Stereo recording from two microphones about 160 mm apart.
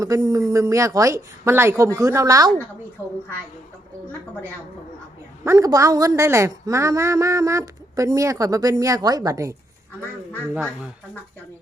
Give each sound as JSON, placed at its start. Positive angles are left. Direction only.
{"t": 0.0, "sound": "a woman's voice", "side_deg": -20}
{"t": 5.5, "sound": "a woman's voice", "side_deg": -20}